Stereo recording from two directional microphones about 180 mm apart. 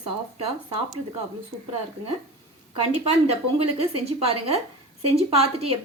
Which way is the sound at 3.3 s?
35° right (ahead or behind).